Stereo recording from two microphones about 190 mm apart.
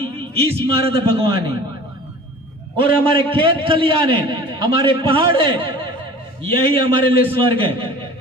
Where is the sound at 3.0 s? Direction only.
25° right (ahead or behind).